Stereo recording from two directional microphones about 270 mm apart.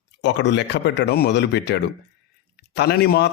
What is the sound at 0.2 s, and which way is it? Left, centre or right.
A man's voice, left.